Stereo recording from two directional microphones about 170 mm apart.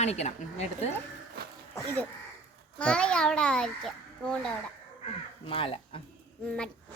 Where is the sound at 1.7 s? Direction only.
10° left (ahead or behind).